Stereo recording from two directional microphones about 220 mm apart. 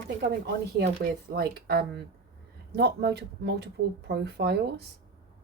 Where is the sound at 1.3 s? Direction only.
45° right (ahead or behind).